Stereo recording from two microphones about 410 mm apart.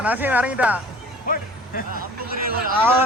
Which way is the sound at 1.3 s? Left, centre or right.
Centre.